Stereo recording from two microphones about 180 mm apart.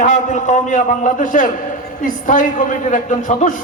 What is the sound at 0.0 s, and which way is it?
A man's voice, 45° left (ahead or behind).